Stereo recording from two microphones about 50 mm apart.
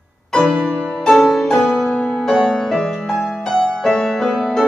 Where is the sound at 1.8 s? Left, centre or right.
Left.